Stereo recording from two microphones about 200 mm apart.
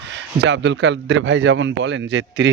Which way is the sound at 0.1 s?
60° right (ahead or behind).